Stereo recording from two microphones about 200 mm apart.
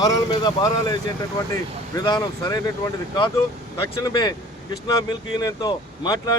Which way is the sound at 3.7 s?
20° left (ahead or behind).